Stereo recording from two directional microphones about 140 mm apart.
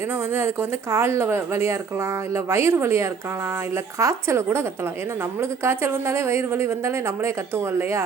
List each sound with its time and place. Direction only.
0.3 s speech: 20° right (ahead or behind)